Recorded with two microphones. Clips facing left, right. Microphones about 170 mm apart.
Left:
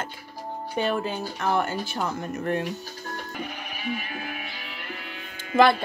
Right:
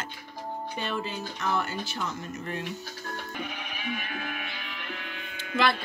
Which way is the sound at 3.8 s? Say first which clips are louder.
Left 3 dB; 40° left (ahead or behind).